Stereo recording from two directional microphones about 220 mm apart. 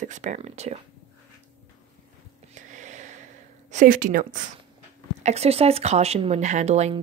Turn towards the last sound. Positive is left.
turn(degrees=-30)  # may be behind; listen again after turning